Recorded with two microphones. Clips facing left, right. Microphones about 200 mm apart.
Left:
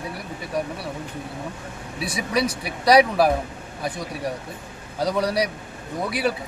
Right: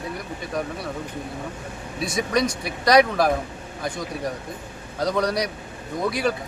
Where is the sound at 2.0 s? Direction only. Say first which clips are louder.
Right 1 dB; 5° left (ahead or behind).